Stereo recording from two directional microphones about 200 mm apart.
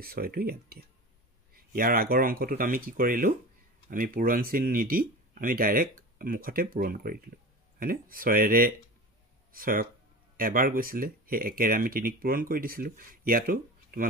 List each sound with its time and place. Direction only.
0.0 s speech: 50° right (ahead or behind)